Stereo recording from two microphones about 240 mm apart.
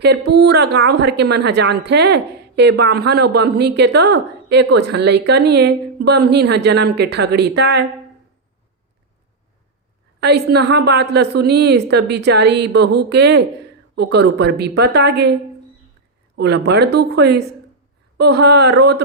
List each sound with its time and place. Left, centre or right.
0.0 s a woman's voice: right
10.2 s a woman's voice: right